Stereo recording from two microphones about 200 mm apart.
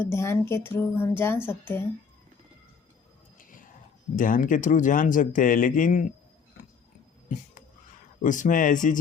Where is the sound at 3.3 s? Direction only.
40° left (ahead or behind).